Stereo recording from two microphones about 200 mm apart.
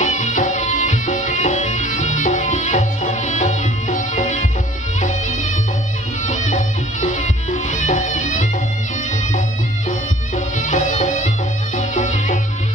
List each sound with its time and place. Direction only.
0.0 s music: 35° left (ahead or behind)
6.2 s music: 40° left (ahead or behind)
9.8 s music: 40° left (ahead or behind)